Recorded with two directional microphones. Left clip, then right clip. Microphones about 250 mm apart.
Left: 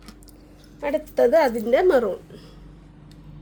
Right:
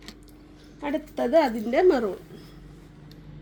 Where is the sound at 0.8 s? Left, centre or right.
Left.